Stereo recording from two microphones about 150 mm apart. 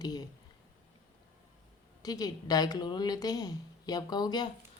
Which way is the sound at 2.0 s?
25° left (ahead or behind).